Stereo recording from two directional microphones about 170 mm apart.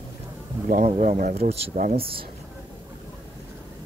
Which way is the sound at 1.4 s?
35° right (ahead or behind).